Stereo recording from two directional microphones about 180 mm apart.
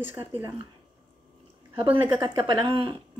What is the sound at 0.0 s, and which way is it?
Speech, 10° right (ahead or behind).